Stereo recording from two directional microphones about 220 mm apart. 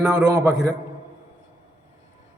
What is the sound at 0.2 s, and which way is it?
Speech, 15° right (ahead or behind).